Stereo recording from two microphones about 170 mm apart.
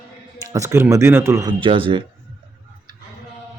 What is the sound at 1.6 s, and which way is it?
Speech, 30° right (ahead or behind).